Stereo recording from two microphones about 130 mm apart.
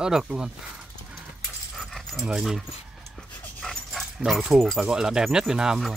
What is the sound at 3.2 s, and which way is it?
Speech, centre (ahead or behind).